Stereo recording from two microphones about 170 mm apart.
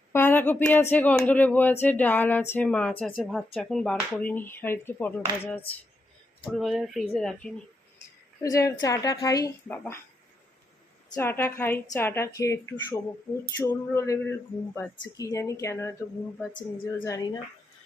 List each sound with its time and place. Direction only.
0.1 s speech: 10° left (ahead or behind)
8.4 s speech: 20° left (ahead or behind)
11.1 s speech: 15° left (ahead or behind)